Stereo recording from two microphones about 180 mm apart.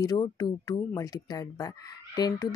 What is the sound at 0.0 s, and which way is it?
Speech, 20° left (ahead or behind).